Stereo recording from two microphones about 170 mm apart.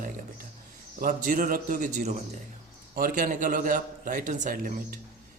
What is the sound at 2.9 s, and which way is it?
A man's voice, 55° right (ahead or behind).